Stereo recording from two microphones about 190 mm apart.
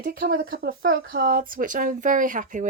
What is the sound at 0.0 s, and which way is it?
Speech, 50° right (ahead or behind).